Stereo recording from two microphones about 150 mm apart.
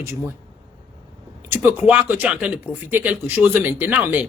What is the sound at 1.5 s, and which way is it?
Speech, 15° right (ahead or behind).